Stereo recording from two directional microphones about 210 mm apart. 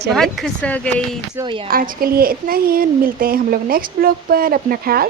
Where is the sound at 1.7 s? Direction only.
45° right (ahead or behind).